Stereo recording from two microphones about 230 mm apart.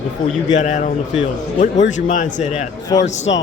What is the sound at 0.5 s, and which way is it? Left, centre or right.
Speech, left.